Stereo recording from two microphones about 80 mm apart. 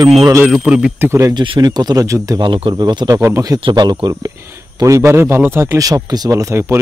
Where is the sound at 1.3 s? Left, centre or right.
Right.